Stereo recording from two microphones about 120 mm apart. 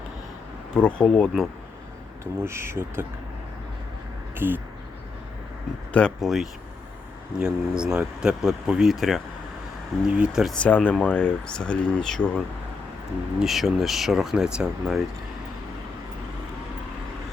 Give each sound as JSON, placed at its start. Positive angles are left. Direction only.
{"t": 0.7, "sound": "speech", "side_deg": 10}
{"t": 2.4, "sound": "speech", "side_deg": -20}
{"t": 4.4, "sound": "speech", "side_deg": -15}
{"t": 5.9, "sound": "speech", "side_deg": 5}
{"t": 10.5, "sound": "speech", "side_deg": 10}
{"t": 13.4, "sound": "speech", "side_deg": 0}